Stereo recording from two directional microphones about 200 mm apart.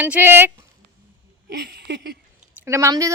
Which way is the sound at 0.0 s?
10° right (ahead or behind).